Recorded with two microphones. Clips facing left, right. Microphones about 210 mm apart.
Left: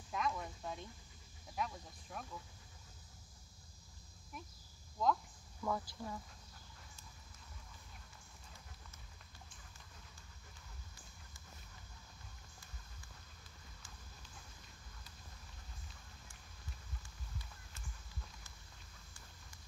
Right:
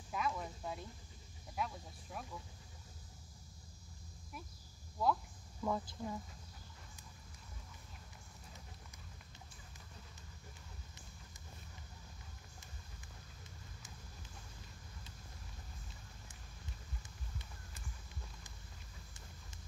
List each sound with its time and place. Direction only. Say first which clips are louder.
0.1 s a sound: even; 5° right (ahead or behind)
2.1 s speech: right 1 dB; 5° right (ahead or behind)
5.0 s speech: even; 10° right (ahead or behind)